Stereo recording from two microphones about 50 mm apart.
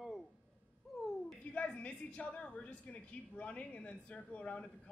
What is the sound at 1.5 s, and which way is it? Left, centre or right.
A woman's voice, left.